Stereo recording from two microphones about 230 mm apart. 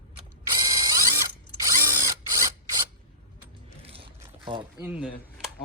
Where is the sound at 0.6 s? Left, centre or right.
Centre.